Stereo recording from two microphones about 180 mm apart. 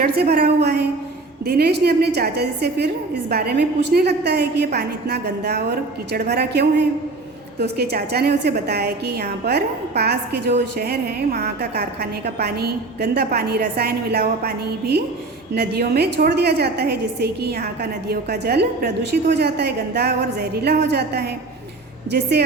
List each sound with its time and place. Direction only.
0.0 s a woman's voice: 60° right (ahead or behind)